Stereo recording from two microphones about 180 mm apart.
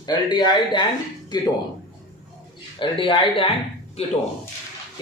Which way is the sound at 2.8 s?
25° left (ahead or behind).